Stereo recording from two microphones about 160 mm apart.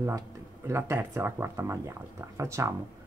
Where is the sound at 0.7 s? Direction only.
15° right (ahead or behind).